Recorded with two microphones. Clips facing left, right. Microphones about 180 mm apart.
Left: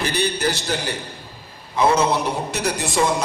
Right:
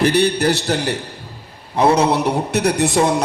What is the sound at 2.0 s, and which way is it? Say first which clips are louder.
A man's voice: right 4 dB; 65° right (ahead or behind).